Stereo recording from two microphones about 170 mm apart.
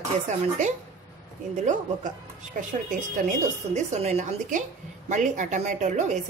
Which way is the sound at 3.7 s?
45° right (ahead or behind).